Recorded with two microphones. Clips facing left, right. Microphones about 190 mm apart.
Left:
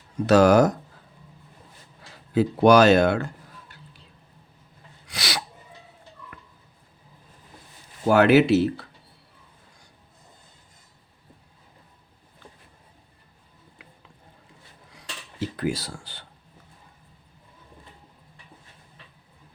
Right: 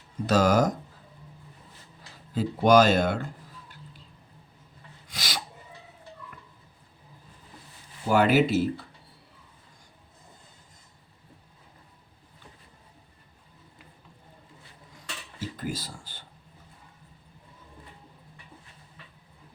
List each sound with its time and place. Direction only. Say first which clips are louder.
0.3 s speech: left 6 dB; 65° left (ahead or behind)
2.3 s speech: left 3 dB; 70° left (ahead or behind)
5.0 s a sound: left 5 dB; 75° left (ahead or behind)
8.0 s speech: left 5 dB; 70° left (ahead or behind)
14.9 s dishes: left 6 dB; 70° left (ahead or behind)